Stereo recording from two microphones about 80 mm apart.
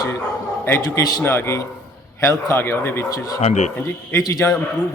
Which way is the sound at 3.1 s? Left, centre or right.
Left.